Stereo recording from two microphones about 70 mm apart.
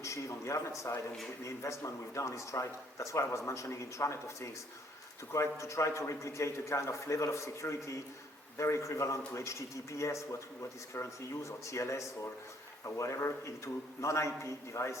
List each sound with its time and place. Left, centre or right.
0.0 s a man's voice: left